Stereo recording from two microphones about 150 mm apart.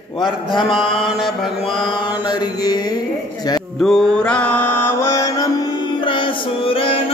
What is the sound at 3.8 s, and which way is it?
Mantra, 5° left (ahead or behind).